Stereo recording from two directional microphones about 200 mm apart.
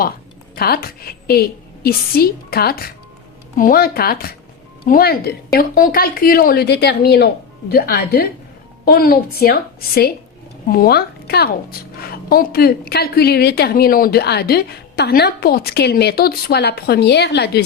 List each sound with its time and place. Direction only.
0.5 s a woman's voice: 50° left (ahead or behind)